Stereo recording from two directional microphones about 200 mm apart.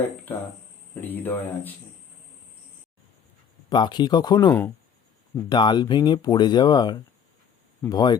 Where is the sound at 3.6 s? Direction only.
20° left (ahead or behind).